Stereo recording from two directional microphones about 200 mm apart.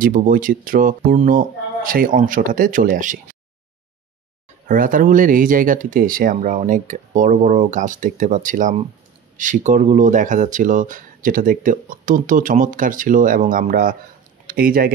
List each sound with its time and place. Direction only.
0.0 s speech: 45° right (ahead or behind)
4.6 s speech: 45° right (ahead or behind)